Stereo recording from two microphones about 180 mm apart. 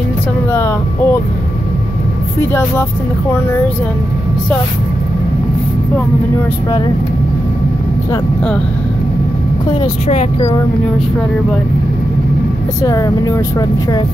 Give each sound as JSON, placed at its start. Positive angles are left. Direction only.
{"t": 0.5, "sound": "vehicle", "side_deg": 15}
{"t": 12.8, "sound": "speech", "side_deg": 20}